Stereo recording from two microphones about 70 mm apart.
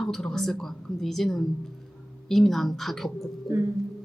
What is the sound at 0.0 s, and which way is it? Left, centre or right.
A woman's voice, centre.